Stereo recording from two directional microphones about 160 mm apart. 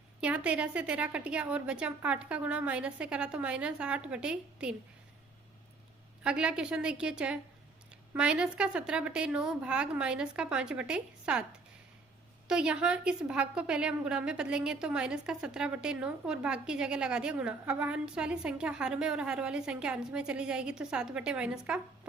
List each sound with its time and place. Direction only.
0.2 s a woman's voice: 5° right (ahead or behind)
6.2 s a woman's voice: 5° right (ahead or behind)
12.5 s a woman's voice: 5° right (ahead or behind)